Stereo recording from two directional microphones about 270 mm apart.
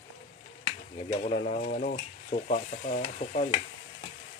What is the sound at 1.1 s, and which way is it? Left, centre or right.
Stir, left.